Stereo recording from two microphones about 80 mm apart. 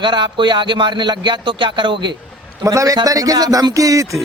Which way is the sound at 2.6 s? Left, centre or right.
Right.